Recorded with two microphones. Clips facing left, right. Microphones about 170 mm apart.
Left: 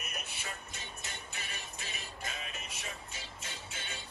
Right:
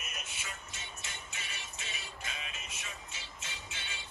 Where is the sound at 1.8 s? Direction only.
40° left (ahead or behind).